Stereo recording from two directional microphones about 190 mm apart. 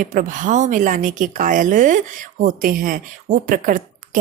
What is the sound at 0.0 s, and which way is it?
A woman's voice, 45° right (ahead or behind).